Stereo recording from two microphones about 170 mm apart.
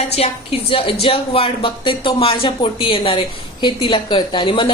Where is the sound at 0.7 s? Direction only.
35° left (ahead or behind).